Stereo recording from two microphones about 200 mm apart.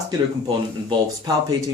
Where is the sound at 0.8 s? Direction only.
20° right (ahead or behind).